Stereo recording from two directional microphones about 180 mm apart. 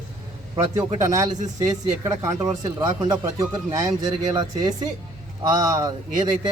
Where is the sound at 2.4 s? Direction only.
20° right (ahead or behind).